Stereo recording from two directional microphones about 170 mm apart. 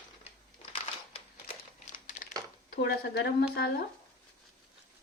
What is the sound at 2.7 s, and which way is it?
A woman's voice, 70° left (ahead or behind).